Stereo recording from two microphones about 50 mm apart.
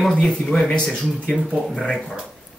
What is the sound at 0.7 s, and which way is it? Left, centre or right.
Speech, centre.